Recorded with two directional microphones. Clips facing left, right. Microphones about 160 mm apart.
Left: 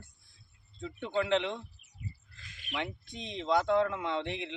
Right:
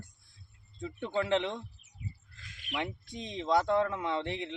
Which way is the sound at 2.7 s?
10° right (ahead or behind).